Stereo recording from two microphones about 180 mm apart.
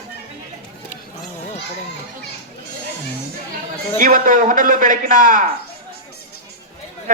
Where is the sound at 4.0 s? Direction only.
45° right (ahead or behind).